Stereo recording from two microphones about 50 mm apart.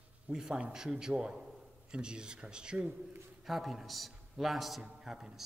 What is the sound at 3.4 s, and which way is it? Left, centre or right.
A man's voice, centre.